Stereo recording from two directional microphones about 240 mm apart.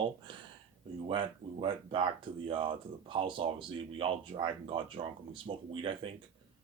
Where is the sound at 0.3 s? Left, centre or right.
Centre.